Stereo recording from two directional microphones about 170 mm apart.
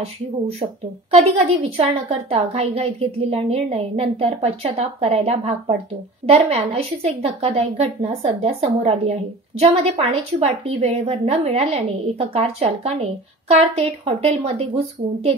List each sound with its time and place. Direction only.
0.0 s a woman's voice: 35° right (ahead or behind)